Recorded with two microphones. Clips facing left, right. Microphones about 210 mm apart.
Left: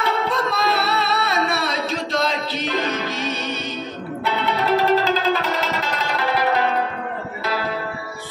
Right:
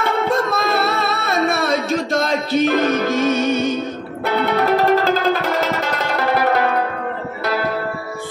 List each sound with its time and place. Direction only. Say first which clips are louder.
0.0 s music: right 4 dB; 50° right (ahead or behind)